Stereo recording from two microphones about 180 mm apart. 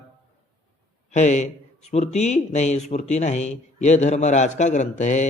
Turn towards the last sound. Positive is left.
turn(degrees=40)  # may be behind; listen again after turning